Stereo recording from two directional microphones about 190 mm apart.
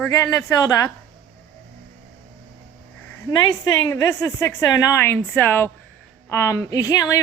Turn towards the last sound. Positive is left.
turn(degrees=15)  # may be behind; listen again after turning